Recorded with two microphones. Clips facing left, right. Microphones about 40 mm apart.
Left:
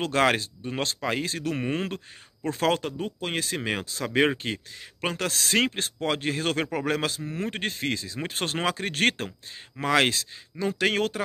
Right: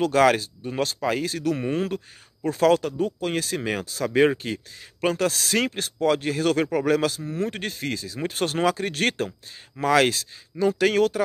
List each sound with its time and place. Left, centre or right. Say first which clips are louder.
0.0 s speech: right 4 dB; left
5.3 s speech: even; left
5.9 s speech: right 7 dB; left
7.2 s speech: right 2 dB; left
9.8 s speech: right 3 dB; left